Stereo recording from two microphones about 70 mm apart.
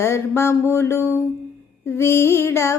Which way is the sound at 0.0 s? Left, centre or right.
Left.